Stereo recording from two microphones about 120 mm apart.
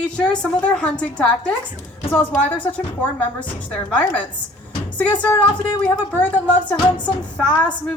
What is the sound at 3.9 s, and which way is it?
Speech, 10° left (ahead or behind).